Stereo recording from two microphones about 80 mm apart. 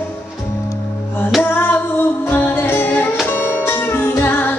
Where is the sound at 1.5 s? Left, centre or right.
Left.